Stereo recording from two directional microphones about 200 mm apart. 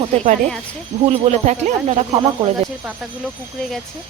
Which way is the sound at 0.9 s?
40° right (ahead or behind).